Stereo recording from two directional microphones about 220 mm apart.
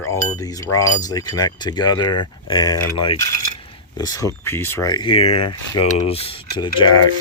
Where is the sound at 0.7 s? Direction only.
15° left (ahead or behind).